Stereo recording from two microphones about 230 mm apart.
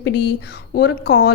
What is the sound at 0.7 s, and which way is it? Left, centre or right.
Speech, left.